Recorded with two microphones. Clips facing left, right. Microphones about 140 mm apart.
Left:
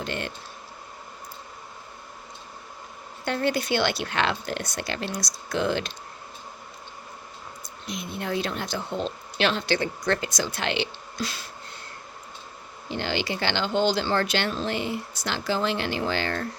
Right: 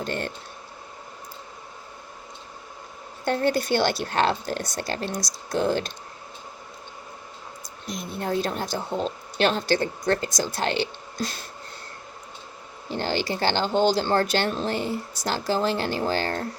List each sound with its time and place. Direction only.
0.0 s speech: 45° right (ahead or behind)
3.2 s speech: 45° right (ahead or behind)
7.9 s speech: 40° right (ahead or behind)
12.9 s speech: 40° right (ahead or behind)